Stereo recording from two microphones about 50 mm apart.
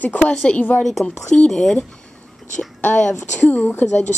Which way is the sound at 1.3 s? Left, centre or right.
Centre.